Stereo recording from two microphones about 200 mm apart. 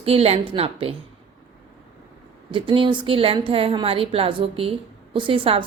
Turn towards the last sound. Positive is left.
turn(degrees=-25)  # may be behind; listen again after turning